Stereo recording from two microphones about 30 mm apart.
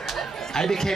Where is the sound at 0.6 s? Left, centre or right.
Centre.